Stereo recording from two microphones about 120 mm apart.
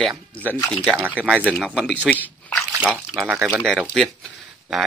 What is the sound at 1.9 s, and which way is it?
Speech, 10° left (ahead or behind).